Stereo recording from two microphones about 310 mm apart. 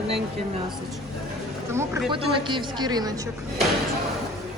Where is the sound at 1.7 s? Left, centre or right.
Centre.